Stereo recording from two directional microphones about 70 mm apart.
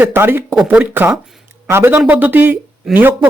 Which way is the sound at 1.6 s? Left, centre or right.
Right.